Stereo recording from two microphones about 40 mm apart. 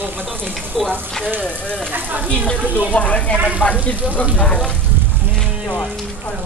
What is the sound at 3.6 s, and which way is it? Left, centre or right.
Speech, left.